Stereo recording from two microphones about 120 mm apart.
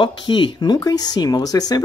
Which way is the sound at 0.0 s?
40° left (ahead or behind).